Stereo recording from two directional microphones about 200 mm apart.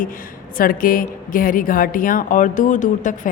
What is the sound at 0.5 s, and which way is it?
A woman's voice, 45° left (ahead or behind).